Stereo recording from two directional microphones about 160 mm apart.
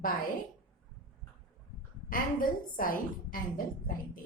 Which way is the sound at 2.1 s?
60° left (ahead or behind).